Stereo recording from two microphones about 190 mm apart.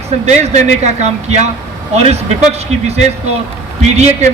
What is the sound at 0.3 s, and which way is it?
A man's voice, 35° right (ahead or behind).